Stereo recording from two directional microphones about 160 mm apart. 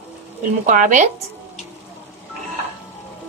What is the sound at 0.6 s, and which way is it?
Speech, 55° right (ahead or behind).